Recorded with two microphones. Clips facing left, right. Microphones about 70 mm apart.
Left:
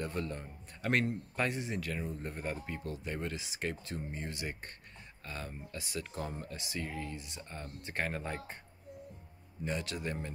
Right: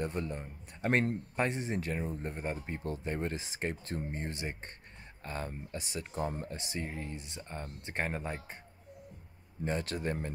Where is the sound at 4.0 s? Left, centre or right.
Right; by 8.6 s centre.